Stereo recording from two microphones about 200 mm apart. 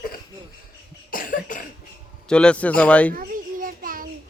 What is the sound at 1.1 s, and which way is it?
Cough, 40° left (ahead or behind).